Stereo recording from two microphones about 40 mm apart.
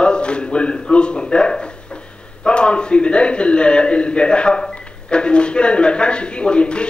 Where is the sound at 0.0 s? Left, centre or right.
Left.